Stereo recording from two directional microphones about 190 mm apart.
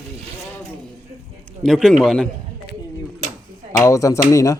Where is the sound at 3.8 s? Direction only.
15° left (ahead or behind).